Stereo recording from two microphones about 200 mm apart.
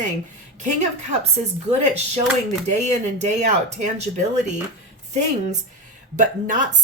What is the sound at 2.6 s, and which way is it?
Speech, 35° right (ahead or behind).